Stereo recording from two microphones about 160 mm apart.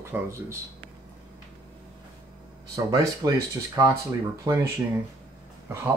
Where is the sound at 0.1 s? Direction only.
10° right (ahead or behind).